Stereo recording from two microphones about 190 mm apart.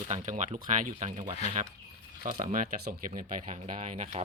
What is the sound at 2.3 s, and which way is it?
Speech, 45° right (ahead or behind).